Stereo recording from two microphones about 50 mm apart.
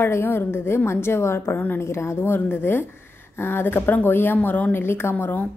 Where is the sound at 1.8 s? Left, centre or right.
Left.